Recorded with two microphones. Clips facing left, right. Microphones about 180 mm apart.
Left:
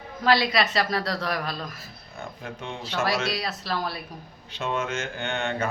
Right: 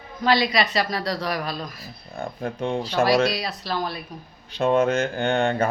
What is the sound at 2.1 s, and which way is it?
Speech, 35° right (ahead or behind).